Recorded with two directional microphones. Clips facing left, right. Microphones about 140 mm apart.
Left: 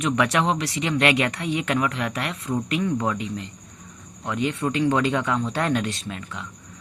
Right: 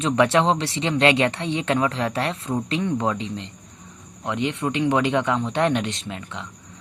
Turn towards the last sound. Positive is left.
turn(degrees=-20)  # may be behind; listen again after turning